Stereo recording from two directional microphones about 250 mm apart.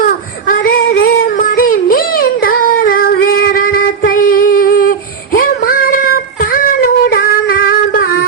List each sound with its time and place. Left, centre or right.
0.0 s child singing: left
6.4 s female singing: left